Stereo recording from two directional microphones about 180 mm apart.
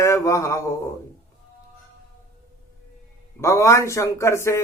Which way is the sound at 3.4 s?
15° left (ahead or behind).